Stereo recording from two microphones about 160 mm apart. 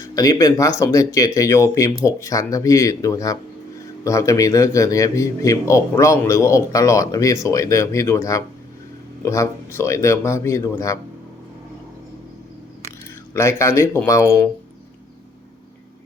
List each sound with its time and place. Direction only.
0.0 s a man's voice: 20° left (ahead or behind)
13.3 s a man's voice: 15° left (ahead or behind)